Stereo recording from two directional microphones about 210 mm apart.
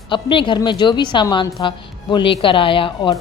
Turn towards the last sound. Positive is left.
turn(degrees=25)  # may be behind; listen again after turning